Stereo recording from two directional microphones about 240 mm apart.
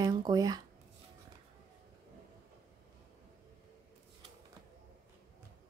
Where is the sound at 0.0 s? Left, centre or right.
Centre.